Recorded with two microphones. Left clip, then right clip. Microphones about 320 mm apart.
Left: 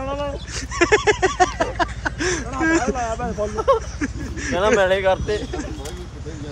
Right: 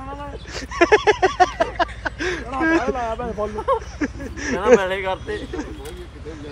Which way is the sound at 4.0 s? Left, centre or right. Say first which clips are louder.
Right 1 dB; centre.